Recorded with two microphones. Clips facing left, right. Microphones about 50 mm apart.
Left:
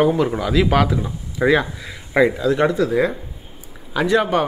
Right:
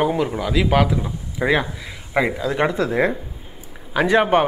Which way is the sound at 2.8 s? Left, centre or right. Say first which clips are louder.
Left 1 dB; right.